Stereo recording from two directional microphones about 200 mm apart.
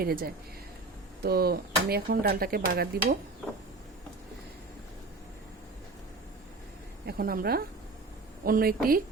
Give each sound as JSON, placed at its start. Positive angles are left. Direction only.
{"t": 0.0, "sound": "speech", "side_deg": -50}
{"t": 7.1, "sound": "speech", "side_deg": -50}